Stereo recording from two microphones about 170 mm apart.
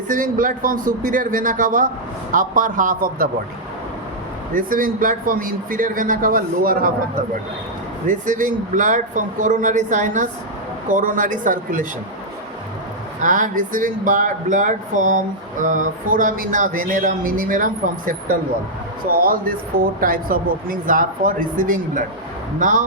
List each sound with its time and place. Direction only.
0.1 s speech: 50° right (ahead or behind)
4.5 s a man's voice: 55° right (ahead or behind)
8.0 s speech: 50° right (ahead or behind)
13.2 s a man's voice: 50° right (ahead or behind)